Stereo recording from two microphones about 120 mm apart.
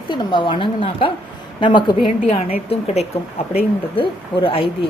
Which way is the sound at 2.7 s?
60° left (ahead or behind).